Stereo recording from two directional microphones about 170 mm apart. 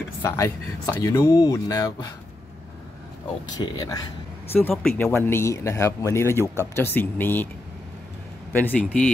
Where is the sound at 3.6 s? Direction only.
20° left (ahead or behind).